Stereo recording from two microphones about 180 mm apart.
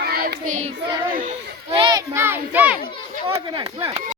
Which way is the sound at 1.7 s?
25° right (ahead or behind).